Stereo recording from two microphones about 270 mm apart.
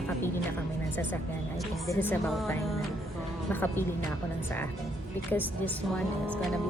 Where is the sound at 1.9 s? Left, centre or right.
Centre.